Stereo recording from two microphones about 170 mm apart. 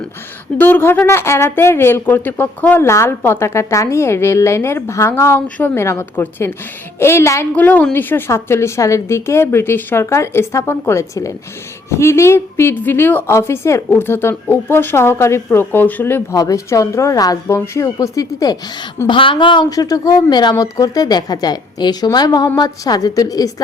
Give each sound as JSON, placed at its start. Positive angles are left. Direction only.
{"t": 0.6, "sound": "a woman's voice", "side_deg": 10}